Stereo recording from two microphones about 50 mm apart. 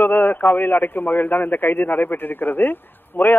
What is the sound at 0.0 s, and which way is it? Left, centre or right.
A man's voice, left.